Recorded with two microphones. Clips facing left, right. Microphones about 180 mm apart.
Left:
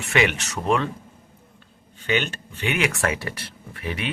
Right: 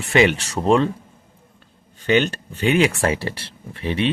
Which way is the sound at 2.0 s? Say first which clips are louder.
Right 6 dB; 40° right (ahead or behind).